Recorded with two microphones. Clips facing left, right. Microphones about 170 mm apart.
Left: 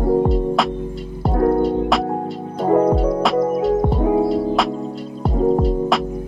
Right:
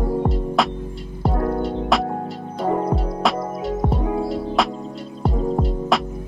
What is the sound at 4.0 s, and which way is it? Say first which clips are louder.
Music: left 7 dB; 25° left (ahead or behind).